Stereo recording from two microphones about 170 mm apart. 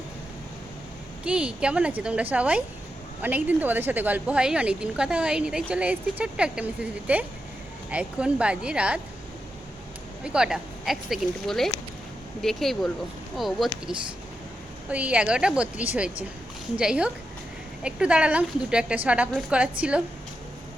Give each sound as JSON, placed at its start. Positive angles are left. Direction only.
{"t": 1.2, "sound": "a woman's voice", "side_deg": -5}
{"t": 10.2, "sound": "speech", "side_deg": -5}
{"t": 14.8, "sound": "a woman's voice", "side_deg": -10}